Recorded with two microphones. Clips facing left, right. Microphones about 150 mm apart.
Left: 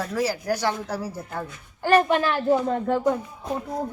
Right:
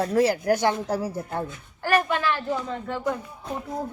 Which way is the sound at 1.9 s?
40° left (ahead or behind).